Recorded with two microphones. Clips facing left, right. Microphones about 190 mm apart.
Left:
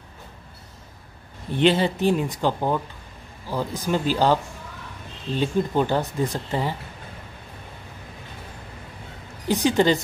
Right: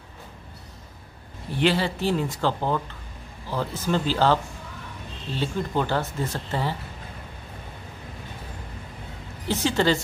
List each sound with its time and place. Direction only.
1.5 s speech: 20° left (ahead or behind)
9.5 s speech: 15° left (ahead or behind)